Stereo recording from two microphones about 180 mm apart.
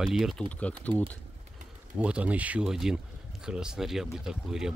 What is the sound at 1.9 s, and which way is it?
Speech, 5° right (ahead or behind).